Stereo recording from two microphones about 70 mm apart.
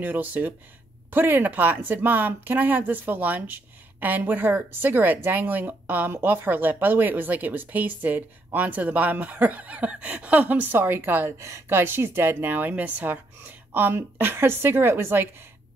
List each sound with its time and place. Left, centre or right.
0.0 s speech: right
11.3 s a woman's voice: right